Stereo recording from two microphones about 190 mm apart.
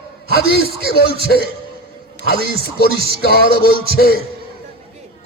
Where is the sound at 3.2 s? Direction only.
55° left (ahead or behind).